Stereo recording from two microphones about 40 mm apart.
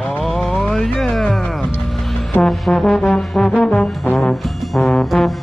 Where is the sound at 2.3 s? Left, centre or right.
Centre.